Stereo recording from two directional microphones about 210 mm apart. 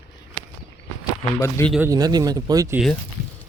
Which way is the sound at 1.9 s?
20° right (ahead or behind).